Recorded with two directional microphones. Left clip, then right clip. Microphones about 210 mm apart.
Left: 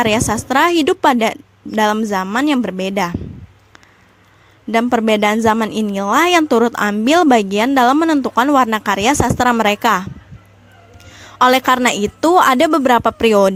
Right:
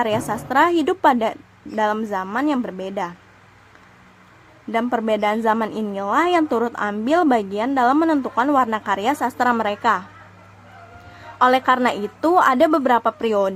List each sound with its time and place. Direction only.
0.0 s a woman's voice: 40° left (ahead or behind)
4.7 s a woman's voice: 35° left (ahead or behind)
11.3 s a woman's voice: 40° left (ahead or behind)